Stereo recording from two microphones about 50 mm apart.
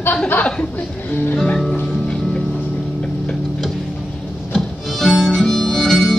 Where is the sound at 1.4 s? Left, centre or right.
Centre.